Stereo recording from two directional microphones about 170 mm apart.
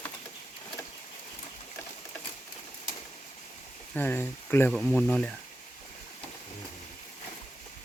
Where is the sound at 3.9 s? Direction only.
10° left (ahead or behind).